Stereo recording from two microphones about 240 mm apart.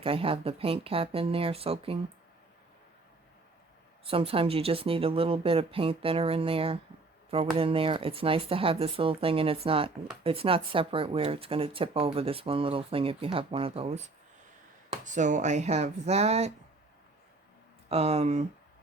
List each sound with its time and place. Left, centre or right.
0.0 s speech: right
4.0 s speech: right
17.8 s speech: right